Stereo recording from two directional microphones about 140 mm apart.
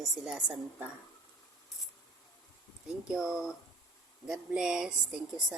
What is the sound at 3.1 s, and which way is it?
A woman's voice, 5° right (ahead or behind).